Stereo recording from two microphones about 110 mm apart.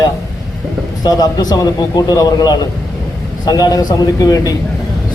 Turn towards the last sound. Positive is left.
turn(degrees=35)  # may be behind; listen again after turning